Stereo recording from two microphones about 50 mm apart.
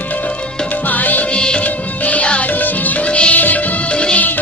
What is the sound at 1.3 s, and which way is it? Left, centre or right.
Music, centre.